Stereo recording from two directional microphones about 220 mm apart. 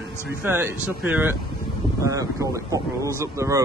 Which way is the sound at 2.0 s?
15° right (ahead or behind).